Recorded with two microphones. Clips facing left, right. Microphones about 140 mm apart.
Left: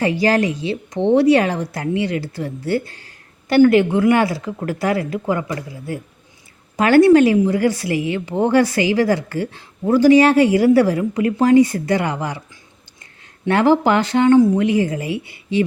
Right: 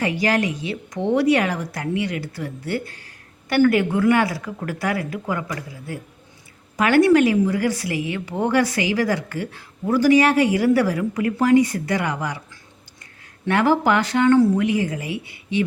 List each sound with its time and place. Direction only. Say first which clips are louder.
0.0 s a woman's voice: left 4 dB; 30° left (ahead or behind)
13.5 s a woman's voice: left 3 dB; 30° left (ahead or behind)
14.6 s a woman's voice: left 4 dB; 30° left (ahead or behind)